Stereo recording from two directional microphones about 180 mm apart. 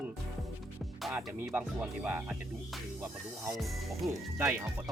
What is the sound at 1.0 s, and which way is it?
Speech, centre (ahead or behind).